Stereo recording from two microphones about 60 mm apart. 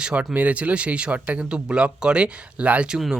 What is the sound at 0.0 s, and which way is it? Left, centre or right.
Speech, centre.